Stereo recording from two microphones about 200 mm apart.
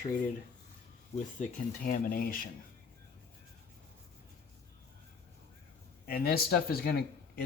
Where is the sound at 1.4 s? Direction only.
45° left (ahead or behind).